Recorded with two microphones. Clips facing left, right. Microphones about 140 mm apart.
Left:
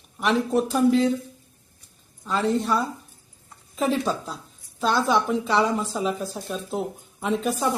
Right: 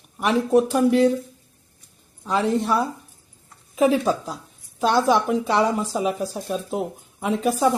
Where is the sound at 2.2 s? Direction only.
15° right (ahead or behind).